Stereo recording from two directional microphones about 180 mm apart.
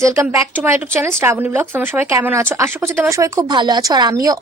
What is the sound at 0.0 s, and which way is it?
Speech, 15° right (ahead or behind).